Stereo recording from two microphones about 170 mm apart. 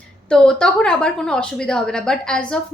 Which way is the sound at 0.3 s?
5° left (ahead or behind).